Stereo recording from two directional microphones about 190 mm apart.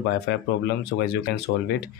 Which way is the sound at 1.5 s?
65° left (ahead or behind).